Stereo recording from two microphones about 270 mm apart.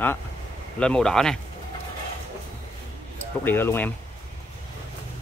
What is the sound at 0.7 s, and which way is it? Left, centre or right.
Speech, centre.